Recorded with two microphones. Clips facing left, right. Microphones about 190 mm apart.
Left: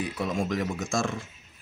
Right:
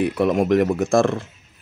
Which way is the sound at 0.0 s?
65° right (ahead or behind).